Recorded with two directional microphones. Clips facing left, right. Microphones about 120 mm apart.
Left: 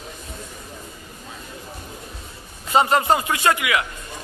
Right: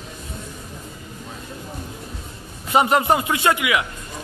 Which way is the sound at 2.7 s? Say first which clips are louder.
Even; 15° right (ahead or behind).